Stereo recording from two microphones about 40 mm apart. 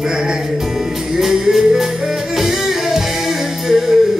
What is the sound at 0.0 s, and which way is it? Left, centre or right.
Music, centre.